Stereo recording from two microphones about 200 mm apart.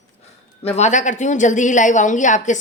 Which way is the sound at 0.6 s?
35° left (ahead or behind).